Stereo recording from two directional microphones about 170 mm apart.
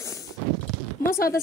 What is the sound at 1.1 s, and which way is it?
Speech, 60° left (ahead or behind).